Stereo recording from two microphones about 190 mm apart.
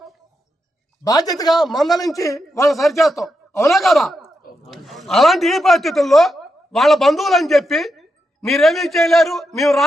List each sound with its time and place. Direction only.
1.0 s a man's voice: 20° left (ahead or behind)
1.5 s speech: centre (ahead or behind)
2.0 s a man's voice: 15° left (ahead or behind)
2.6 s a man's voice: centre (ahead or behind)